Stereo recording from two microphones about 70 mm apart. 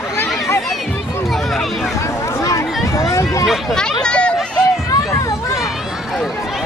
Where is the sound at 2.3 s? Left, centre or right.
Left.